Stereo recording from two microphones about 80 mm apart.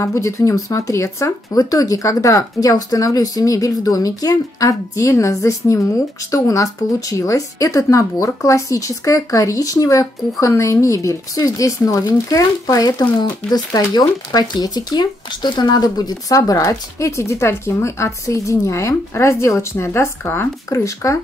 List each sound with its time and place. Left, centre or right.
0.0 s speech: left
20.8 s speech: left